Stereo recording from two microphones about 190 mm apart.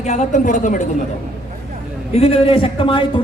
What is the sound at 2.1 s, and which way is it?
Speech, 30° left (ahead or behind).